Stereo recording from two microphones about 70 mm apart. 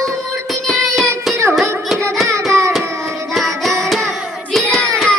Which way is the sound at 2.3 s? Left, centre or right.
Right.